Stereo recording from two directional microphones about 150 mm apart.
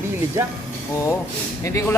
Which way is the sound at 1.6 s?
20° left (ahead or behind).